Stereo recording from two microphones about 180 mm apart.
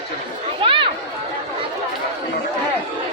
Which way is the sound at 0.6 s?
30° right (ahead or behind).